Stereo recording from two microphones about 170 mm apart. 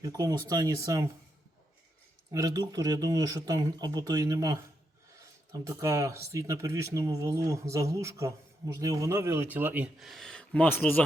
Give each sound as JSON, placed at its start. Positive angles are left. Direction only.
{"t": 0.0, "sound": "speech", "side_deg": -20}
{"t": 2.3, "sound": "speech", "side_deg": -20}